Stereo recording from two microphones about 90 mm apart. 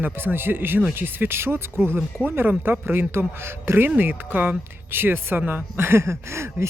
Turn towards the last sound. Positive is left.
turn(degrees=-30)  # may be behind; listen again after turning